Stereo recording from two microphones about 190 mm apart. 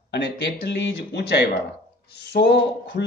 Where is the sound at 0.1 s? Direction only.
65° left (ahead or behind).